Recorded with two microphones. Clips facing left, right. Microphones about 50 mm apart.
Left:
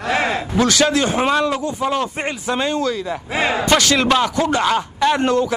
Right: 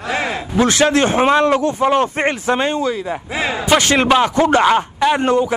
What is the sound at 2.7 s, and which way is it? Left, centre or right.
Speech, centre.